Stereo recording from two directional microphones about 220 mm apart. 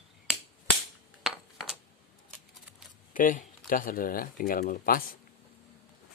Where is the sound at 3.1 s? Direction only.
35° left (ahead or behind).